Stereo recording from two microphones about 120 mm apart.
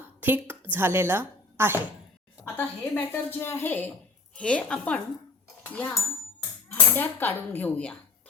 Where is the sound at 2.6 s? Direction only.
15° left (ahead or behind).